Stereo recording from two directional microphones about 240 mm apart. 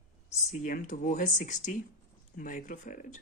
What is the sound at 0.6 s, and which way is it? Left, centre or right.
Speech, left.